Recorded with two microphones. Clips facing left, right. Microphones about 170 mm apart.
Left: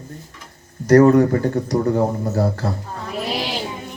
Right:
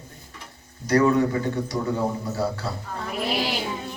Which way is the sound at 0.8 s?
45° left (ahead or behind).